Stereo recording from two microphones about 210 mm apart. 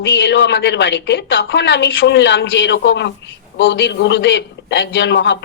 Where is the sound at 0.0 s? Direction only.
60° left (ahead or behind).